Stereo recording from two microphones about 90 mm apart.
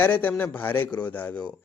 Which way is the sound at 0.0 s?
20° left (ahead or behind).